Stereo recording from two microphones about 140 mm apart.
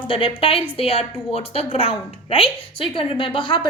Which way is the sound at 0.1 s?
40° left (ahead or behind).